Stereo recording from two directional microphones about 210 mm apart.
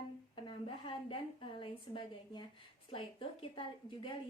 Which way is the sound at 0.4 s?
25° left (ahead or behind).